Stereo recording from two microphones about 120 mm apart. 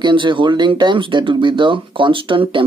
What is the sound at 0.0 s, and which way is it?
Speech, 40° right (ahead or behind).